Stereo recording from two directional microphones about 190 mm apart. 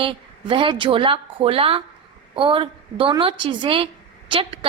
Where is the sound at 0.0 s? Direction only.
25° right (ahead or behind).